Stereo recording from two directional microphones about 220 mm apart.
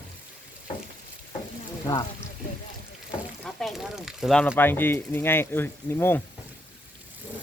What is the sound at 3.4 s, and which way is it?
Speech, centre (ahead or behind).